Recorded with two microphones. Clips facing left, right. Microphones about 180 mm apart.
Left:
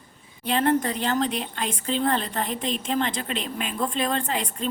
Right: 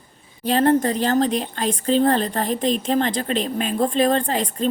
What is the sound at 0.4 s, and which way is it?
A woman's voice, 35° right (ahead or behind).